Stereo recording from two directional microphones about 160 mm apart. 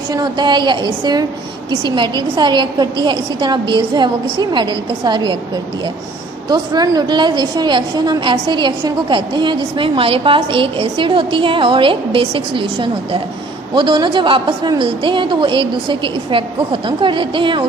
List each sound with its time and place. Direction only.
0.1 s a woman's voice: 25° right (ahead or behind)
6.5 s a woman's voice: 25° right (ahead or behind)